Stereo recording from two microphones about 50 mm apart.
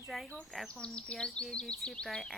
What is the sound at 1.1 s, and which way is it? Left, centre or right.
Bird vocalization, centre.